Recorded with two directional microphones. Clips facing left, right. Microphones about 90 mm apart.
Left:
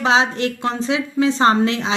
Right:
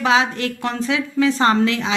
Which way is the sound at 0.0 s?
30° left (ahead or behind).